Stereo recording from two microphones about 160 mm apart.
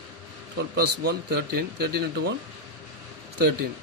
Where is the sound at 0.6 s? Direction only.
90° right.